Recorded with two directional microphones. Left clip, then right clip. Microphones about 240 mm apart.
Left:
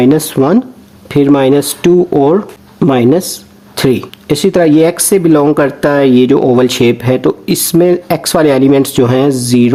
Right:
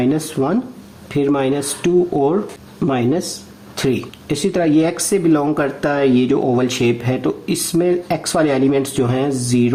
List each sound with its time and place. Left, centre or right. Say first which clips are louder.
0.0 s speech: left 9 dB; left